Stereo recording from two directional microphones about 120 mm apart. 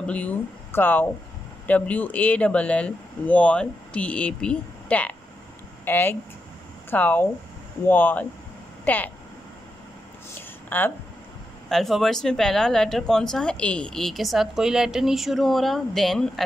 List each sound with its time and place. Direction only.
0.0 s speech: 10° left (ahead or behind)
10.7 s speech: 15° left (ahead or behind)
11.7 s speech: centre (ahead or behind)